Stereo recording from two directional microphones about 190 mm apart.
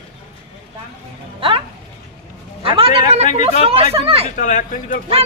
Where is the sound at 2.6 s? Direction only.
30° right (ahead or behind).